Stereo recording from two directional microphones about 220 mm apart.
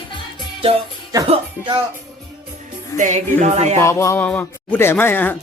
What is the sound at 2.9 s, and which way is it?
Speech, 35° right (ahead or behind).